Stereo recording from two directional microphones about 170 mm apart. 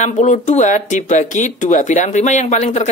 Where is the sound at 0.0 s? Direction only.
45° left (ahead or behind).